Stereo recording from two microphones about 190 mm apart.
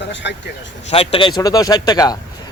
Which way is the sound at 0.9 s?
30° left (ahead or behind).